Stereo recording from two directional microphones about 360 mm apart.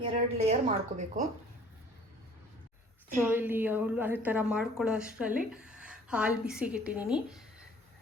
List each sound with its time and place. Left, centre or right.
0.0 s a woman's voice: centre
3.2 s a woman's voice: centre